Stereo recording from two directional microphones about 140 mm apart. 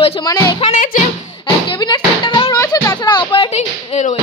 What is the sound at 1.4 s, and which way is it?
Music, 35° left (ahead or behind).